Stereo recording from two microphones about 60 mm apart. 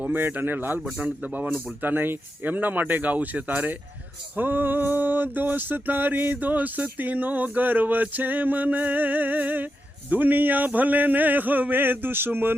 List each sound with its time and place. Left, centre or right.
0.0 s a man's voice: right
1.2 s a sound: right
10.1 s a man's voice: right